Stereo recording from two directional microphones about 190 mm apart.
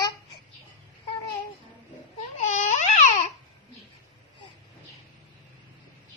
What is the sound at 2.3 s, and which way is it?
Babbling, 40° left (ahead or behind).